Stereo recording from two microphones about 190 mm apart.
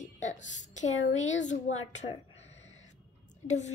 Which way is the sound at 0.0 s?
40° left (ahead or behind).